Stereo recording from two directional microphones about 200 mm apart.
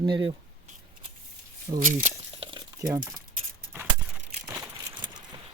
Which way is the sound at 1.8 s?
40° right (ahead or behind).